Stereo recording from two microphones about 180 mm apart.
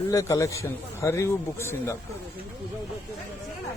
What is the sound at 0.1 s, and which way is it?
A man's voice, 20° left (ahead or behind).